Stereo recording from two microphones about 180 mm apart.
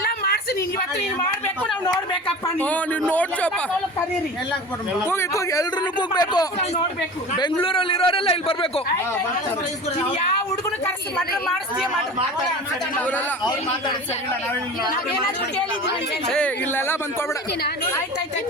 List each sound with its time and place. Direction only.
2.6 s speech: 10° left (ahead or behind)
5.0 s a man's voice: 15° left (ahead or behind)
7.6 s a man's voice: 30° left (ahead or behind)
10.8 s speech: 5° left (ahead or behind)
16.3 s speech: 5° left (ahead or behind)